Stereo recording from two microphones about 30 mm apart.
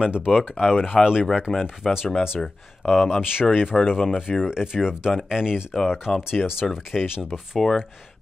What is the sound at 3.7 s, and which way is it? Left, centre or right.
Speech, centre.